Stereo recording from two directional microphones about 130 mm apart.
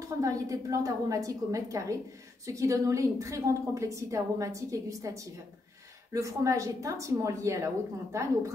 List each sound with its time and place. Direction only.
0.0 s a woman's voice: 25° right (ahead or behind)